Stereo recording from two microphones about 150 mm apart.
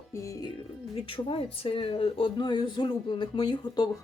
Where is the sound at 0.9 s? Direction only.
35° left (ahead or behind).